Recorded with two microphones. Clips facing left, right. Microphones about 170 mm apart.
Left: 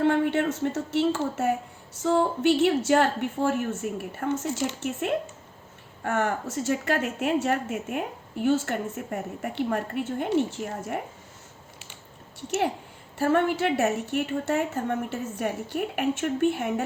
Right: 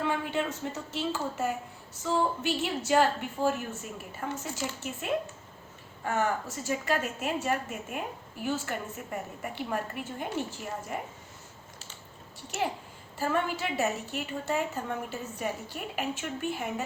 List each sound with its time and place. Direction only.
0.0 s a woman's voice: 60° left (ahead or behind)
13.1 s a woman's voice: 60° left (ahead or behind)